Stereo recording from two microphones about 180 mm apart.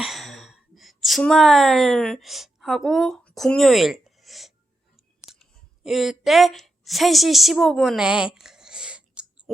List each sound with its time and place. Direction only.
0.0 s a sound: centre (ahead or behind)
5.3 s clicking: 35° left (ahead or behind)
5.8 s a woman's voice: centre (ahead or behind)